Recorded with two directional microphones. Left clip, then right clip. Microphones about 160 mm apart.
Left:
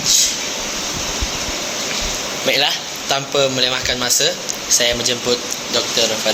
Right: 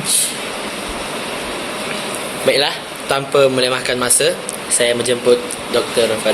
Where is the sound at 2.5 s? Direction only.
10° right (ahead or behind).